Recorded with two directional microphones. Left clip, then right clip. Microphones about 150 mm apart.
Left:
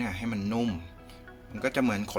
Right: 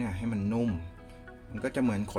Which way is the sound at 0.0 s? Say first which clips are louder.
Left 2 dB; 5° right (ahead or behind).